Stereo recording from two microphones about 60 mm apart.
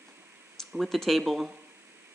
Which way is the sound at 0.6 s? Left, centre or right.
Centre.